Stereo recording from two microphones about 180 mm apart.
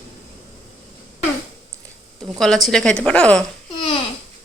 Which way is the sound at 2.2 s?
Centre (ahead or behind).